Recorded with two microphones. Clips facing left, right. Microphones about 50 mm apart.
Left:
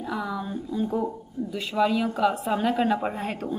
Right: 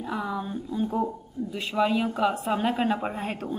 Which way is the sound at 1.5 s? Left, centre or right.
Centre.